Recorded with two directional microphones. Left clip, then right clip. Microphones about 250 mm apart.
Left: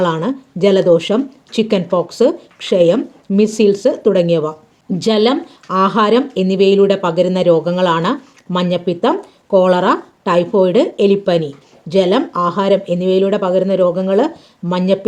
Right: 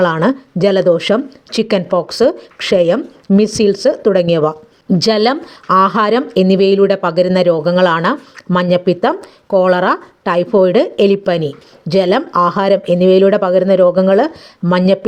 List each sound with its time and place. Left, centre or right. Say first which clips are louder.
0.0 s speech: right 4 dB; centre